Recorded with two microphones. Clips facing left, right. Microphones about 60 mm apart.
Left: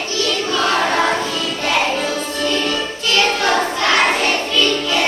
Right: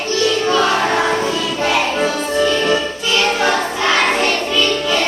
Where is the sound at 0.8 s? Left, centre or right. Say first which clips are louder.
Right 1 dB; right.